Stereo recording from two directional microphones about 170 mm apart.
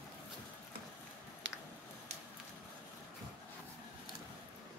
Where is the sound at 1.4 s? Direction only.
90° right.